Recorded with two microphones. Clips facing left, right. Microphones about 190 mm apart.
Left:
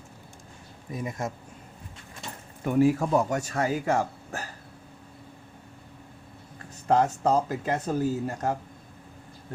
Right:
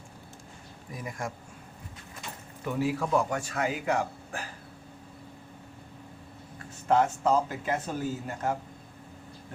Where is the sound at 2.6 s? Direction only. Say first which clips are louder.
Left 7 dB; 50° left (ahead or behind).